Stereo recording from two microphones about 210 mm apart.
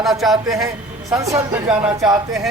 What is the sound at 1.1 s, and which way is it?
Speech, 15° right (ahead or behind).